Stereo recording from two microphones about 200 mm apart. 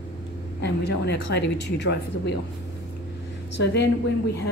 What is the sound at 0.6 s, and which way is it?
Speech, 60° left (ahead or behind).